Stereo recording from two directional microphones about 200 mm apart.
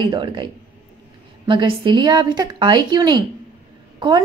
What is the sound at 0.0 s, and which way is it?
A woman's voice, 25° right (ahead or behind).